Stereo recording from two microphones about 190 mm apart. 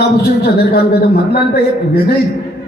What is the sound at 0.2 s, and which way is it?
Speech, 55° left (ahead or behind).